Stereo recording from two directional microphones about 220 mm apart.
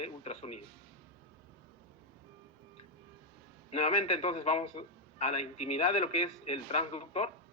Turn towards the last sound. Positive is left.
turn(degrees=30)  # may be behind; listen again after turning